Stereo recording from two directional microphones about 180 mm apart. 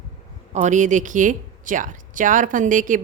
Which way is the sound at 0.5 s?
40° right (ahead or behind).